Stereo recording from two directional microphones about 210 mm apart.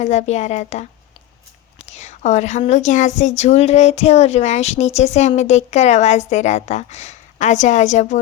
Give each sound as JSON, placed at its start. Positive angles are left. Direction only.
{"t": 0.0, "sound": "a woman's voice", "side_deg": 35}